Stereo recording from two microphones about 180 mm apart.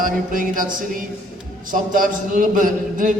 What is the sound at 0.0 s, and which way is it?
A man's voice, 50° right (ahead or behind).